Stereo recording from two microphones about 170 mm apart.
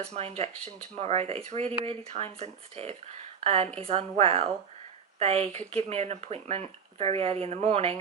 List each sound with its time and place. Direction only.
0.1 s speech: 35° right (ahead or behind)